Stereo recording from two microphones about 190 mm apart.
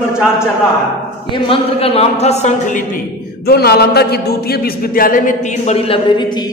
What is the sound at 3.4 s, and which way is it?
A man's voice, 55° left (ahead or behind).